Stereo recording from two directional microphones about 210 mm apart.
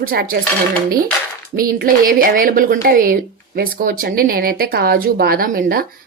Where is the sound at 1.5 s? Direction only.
45° right (ahead or behind).